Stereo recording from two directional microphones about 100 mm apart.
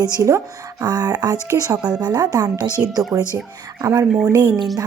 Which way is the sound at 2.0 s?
45° right (ahead or behind).